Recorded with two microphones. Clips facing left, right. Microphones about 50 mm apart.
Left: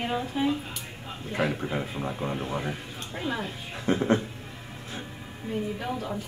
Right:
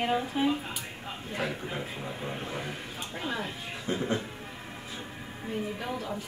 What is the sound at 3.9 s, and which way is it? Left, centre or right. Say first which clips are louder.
Speech: left 6 dB; left.